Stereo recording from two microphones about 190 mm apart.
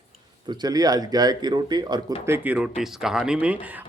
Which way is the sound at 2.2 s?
10° right (ahead or behind).